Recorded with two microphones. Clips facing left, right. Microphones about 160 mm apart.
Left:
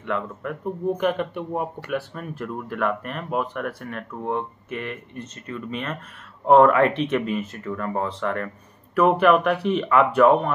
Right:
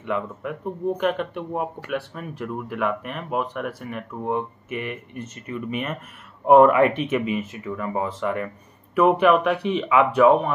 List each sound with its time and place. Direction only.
0.0 s speech: 5° right (ahead or behind)